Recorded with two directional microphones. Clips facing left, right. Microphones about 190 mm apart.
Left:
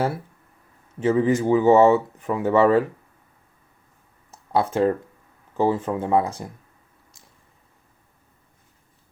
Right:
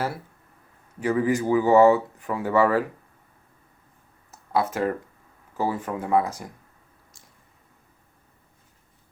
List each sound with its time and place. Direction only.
0.9 s speech: 25° left (ahead or behind)
4.3 s a sound: 30° left (ahead or behind)
5.5 s speech: 25° left (ahead or behind)